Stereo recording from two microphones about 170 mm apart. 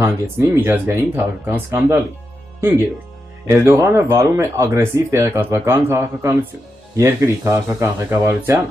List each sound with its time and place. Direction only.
0.0 s speech: 15° right (ahead or behind)
3.4 s speech: 15° right (ahead or behind)